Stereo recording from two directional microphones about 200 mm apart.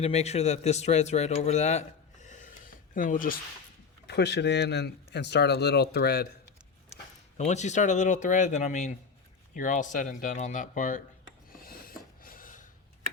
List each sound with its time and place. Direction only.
0.0 s speech: 30° left (ahead or behind)
4.0 s speech: 55° left (ahead or behind)
7.3 s speech: 35° left (ahead or behind)
11.5 s a sound: 45° left (ahead or behind)